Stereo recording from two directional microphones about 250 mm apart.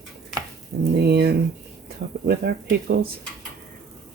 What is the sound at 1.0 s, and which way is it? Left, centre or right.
Speech, right.